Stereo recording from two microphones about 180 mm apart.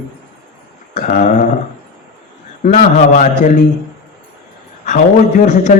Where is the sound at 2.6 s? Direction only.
45° left (ahead or behind).